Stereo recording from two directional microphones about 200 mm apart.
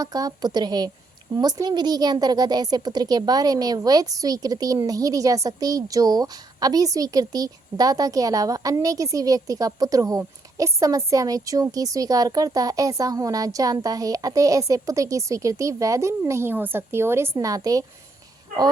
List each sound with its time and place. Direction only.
0.0 s a woman's voice: 20° right (ahead or behind)